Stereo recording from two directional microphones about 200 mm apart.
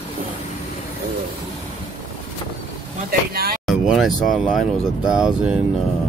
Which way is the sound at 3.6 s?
5° right (ahead or behind).